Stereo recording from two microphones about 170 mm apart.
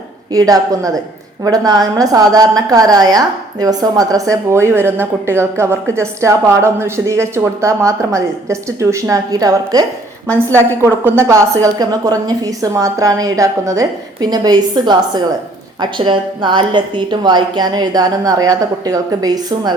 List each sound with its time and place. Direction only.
0.3 s a woman's voice: 20° right (ahead or behind)